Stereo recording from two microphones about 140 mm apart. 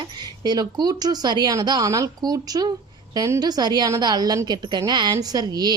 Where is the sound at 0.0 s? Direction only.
30° right (ahead or behind).